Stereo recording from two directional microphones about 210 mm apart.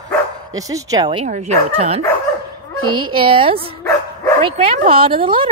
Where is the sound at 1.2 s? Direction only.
35° right (ahead or behind).